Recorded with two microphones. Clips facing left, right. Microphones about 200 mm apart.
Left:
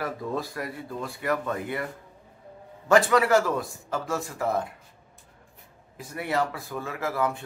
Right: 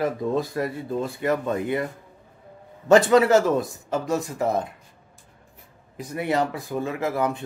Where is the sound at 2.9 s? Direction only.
25° right (ahead or behind).